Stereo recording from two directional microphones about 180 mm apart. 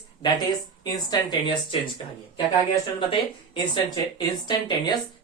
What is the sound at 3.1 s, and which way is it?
Speech, 25° left (ahead or behind).